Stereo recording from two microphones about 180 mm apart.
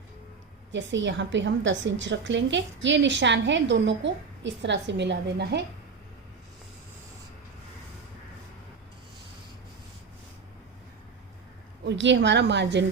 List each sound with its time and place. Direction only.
0.7 s a woman's voice: 90° right; by 5.6 s 70° right (ahead or behind)
11.9 s a woman's voice: 80° right